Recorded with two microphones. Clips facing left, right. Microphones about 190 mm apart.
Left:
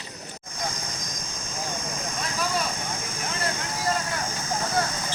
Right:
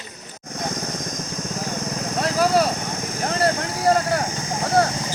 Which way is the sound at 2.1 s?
75° right (ahead or behind).